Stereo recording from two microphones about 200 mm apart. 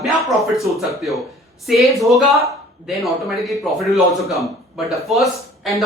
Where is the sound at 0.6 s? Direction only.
Centre (ahead or behind).